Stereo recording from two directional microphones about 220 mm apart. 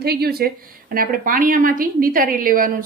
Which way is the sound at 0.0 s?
45° right (ahead or behind).